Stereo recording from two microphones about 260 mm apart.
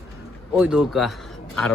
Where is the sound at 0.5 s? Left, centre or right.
Centre.